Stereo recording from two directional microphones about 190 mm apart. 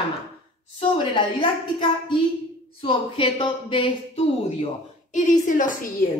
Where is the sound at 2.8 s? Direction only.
30° left (ahead or behind); by 5.9 s 45° left (ahead or behind).